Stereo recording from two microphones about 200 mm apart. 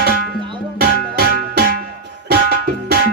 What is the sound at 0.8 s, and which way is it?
Music, 50° right (ahead or behind).